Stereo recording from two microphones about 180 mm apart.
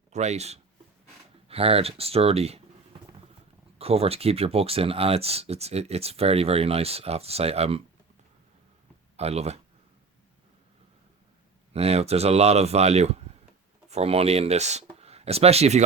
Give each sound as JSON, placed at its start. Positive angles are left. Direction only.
{"t": 0.1, "sound": "speech", "side_deg": -40}
{"t": 3.8, "sound": "speech", "side_deg": -35}
{"t": 9.1, "sound": "speech", "side_deg": -35}
{"t": 11.7, "sound": "speech", "side_deg": -35}